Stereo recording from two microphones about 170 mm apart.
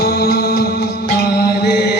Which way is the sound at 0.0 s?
70° left (ahead or behind).